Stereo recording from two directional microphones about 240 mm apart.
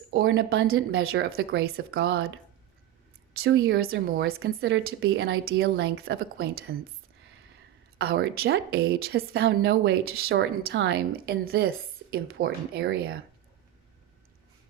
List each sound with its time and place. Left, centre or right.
0.1 s a woman's voice: right
4.8 s a woman's voice: right
5.0 s a woman's voice: right
7.9 s a woman's voice: right